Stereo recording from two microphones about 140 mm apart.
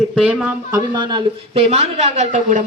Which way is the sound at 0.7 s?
30° right (ahead or behind).